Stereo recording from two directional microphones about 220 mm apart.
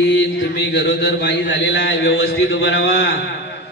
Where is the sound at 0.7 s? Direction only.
55° left (ahead or behind).